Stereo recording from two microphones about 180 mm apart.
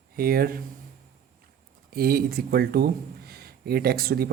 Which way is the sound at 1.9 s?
60° right (ahead or behind).